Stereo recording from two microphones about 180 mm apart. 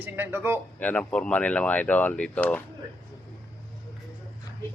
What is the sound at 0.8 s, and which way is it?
Speech, 5° left (ahead or behind).